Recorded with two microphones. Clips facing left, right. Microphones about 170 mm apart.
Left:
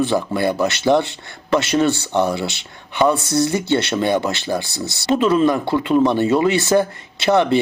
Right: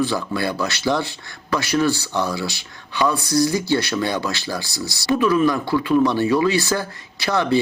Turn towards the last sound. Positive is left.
turn(degrees=20)  # may be behind; listen again after turning